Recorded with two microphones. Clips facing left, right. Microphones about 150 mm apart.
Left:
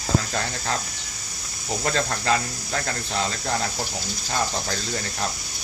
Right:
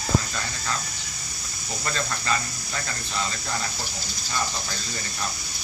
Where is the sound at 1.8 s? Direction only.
75° left (ahead or behind).